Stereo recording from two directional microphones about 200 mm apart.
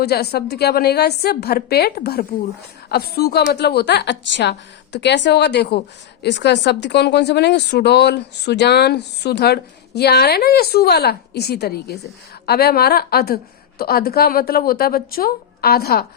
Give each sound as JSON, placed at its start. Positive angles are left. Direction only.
{"t": 0.0, "sound": "a woman's voice", "side_deg": 55}